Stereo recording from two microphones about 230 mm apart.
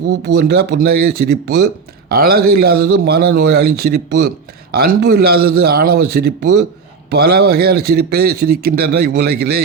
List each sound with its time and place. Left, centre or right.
0.3 s a man's voice: right